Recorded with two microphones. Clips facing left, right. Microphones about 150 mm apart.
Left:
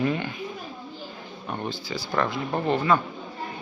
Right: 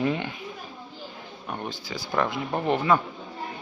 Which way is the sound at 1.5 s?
5° right (ahead or behind).